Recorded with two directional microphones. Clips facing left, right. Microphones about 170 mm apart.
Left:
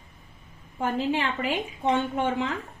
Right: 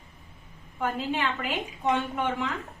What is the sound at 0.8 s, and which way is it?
Speech, 25° left (ahead or behind).